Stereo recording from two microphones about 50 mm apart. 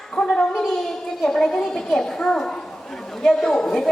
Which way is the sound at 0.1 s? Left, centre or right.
Centre.